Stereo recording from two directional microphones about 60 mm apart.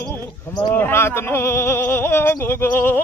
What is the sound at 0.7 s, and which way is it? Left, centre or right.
Speech, left.